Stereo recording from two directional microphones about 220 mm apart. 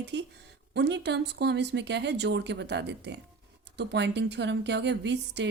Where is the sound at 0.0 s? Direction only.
50° right (ahead or behind).